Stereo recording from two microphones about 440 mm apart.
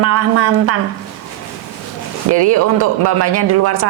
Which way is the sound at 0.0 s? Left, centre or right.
Right.